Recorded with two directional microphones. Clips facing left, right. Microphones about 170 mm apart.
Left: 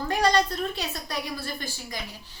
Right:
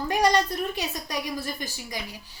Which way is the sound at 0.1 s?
15° right (ahead or behind).